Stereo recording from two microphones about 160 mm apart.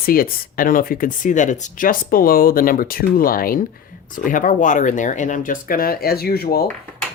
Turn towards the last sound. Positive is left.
turn(degrees=70)  # may be behind; listen again after turning